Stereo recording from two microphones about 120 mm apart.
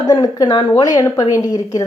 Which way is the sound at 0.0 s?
35° left (ahead or behind).